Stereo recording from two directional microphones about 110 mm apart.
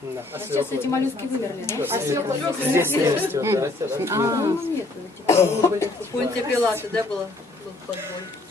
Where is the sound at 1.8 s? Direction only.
20° right (ahead or behind).